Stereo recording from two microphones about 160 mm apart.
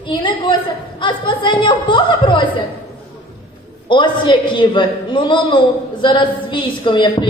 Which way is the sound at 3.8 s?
30° left (ahead or behind).